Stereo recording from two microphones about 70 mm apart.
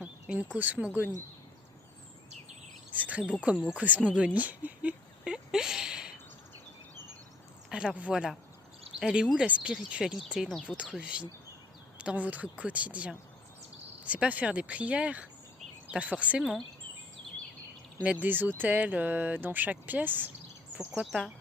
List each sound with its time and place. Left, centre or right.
0.3 s speech: right
2.9 s speech: right
4.4 s a sound: right
7.7 s speech: centre
16.4 s speech: centre
18.0 s speech: right
21.0 s speech: centre